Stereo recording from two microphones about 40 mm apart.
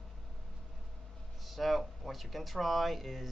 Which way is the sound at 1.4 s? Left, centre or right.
Centre.